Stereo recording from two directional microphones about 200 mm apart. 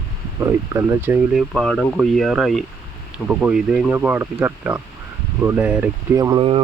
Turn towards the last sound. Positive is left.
turn(degrees=-25)  # may be behind; listen again after turning